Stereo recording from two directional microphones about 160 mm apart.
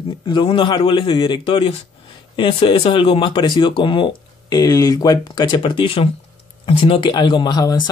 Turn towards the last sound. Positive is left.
turn(degrees=25)  # may be behind; listen again after turning